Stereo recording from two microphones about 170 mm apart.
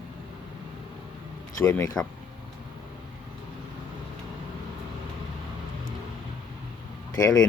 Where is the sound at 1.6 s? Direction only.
15° left (ahead or behind).